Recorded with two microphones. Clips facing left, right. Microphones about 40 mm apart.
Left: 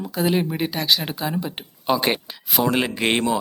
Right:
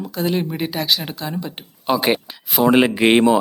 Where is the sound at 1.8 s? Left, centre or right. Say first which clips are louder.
Right 3 dB; centre.